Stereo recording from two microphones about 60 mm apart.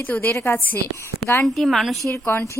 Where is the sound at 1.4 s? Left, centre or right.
Centre.